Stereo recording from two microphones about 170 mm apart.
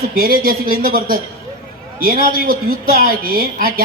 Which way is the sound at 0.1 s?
60° right (ahead or behind).